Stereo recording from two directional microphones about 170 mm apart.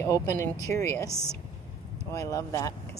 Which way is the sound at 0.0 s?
20° left (ahead or behind).